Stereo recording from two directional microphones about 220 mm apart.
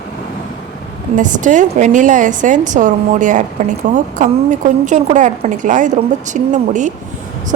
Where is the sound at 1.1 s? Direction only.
35° right (ahead or behind).